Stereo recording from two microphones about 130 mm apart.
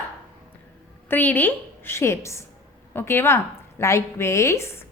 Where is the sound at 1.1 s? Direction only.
15° left (ahead or behind).